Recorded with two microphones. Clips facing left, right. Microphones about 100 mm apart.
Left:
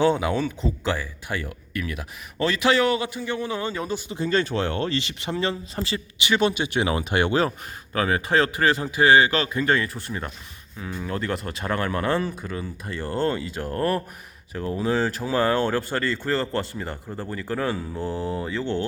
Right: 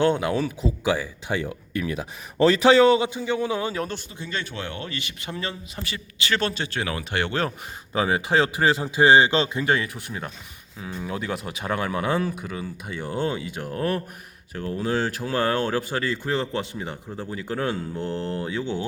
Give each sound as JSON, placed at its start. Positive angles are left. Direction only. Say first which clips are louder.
{"t": 0.0, "sound": "speech", "louder": "even", "side_deg": 0}
{"t": 4.2, "sound": "speech", "louder": "left 10 dB", "side_deg": 40}
{"t": 7.9, "sound": "a man's voice", "louder": "even", "side_deg": -15}